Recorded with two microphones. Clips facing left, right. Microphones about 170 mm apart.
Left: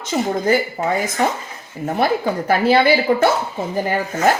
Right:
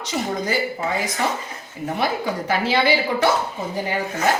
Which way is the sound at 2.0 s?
55° left (ahead or behind).